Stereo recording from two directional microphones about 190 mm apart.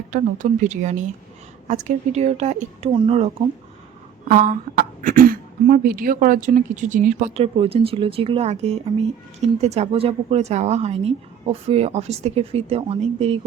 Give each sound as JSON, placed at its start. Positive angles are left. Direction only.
{"t": 0.1, "sound": "speech", "side_deg": -40}